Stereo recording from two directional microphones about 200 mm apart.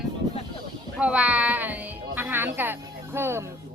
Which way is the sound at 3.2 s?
10° right (ahead or behind).